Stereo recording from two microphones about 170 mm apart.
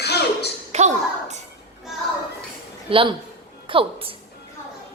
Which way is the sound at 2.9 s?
30° right (ahead or behind).